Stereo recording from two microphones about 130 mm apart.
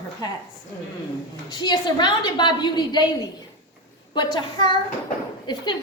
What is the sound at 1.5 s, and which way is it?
A woman's voice, 35° left (ahead or behind).